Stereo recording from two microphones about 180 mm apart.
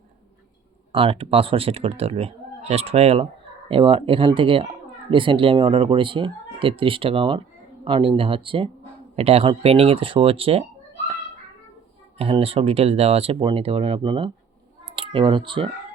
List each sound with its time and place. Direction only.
0.9 s speech: 30° right (ahead or behind)
12.1 s speech: 35° right (ahead or behind)